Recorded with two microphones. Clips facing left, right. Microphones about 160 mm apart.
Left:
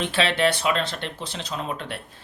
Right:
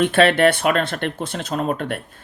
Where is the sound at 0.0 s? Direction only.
55° right (ahead or behind).